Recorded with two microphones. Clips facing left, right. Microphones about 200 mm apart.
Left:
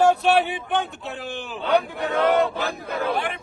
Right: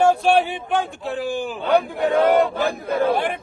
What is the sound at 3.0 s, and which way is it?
Speech, 50° right (ahead or behind).